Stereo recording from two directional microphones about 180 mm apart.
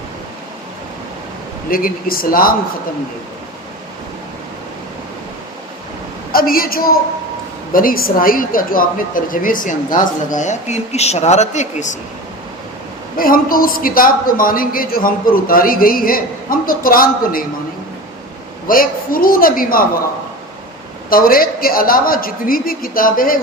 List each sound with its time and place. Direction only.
1.7 s a woman's voice: 55° left (ahead or behind)
6.3 s a woman's voice: 55° left (ahead or behind)
13.1 s a woman's voice: 55° left (ahead or behind)
18.7 s a woman's voice: 50° left (ahead or behind)
21.1 s a woman's voice: 55° left (ahead or behind)